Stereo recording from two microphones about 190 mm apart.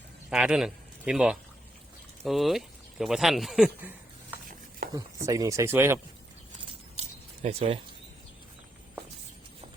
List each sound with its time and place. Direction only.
0.3 s speech: 5° right (ahead or behind)
4.9 s speech: 20° right (ahead or behind)
7.4 s speech: 30° right (ahead or behind)